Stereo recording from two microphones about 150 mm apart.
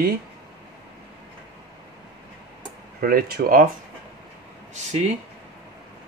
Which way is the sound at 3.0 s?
80° right.